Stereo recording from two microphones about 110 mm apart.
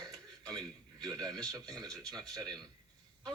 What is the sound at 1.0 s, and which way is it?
Speech, 35° right (ahead or behind).